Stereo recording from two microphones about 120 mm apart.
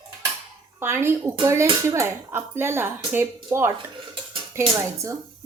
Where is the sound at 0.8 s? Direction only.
20° right (ahead or behind).